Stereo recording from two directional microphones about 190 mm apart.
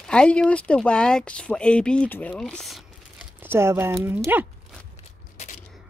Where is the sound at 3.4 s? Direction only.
10° right (ahead or behind).